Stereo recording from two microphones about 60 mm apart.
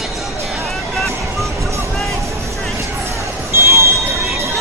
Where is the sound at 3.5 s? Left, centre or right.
Right.